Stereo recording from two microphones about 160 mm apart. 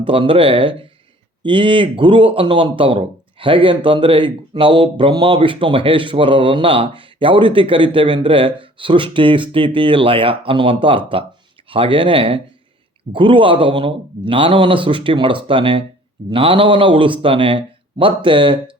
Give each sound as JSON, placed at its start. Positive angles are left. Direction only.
{"t": 0.0, "sound": "speech", "side_deg": -35}